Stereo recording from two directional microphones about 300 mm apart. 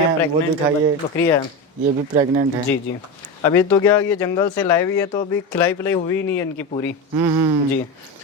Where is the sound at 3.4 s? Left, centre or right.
Centre.